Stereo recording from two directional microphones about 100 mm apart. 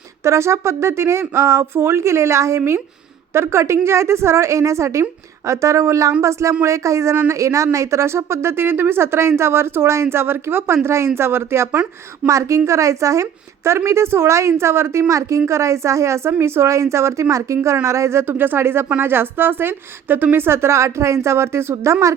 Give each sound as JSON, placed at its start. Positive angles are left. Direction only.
{"t": 0.3, "sound": "a woman's voice", "side_deg": -30}